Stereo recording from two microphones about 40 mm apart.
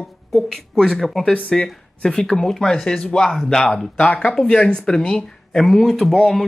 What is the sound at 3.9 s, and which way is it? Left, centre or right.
Speech, left.